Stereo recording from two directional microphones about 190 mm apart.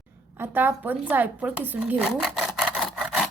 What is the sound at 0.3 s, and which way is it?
Speech, 10° right (ahead or behind).